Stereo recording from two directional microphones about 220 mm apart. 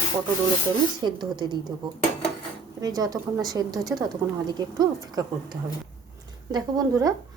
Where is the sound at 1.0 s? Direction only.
20° right (ahead or behind).